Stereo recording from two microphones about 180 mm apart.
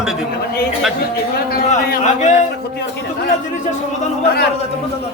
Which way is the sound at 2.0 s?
40° left (ahead or behind).